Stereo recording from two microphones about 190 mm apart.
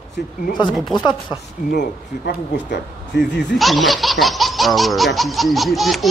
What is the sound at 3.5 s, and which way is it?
Speech, centre (ahead or behind).